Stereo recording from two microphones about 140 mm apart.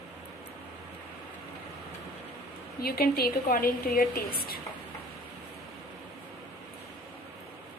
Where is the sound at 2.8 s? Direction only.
90° left.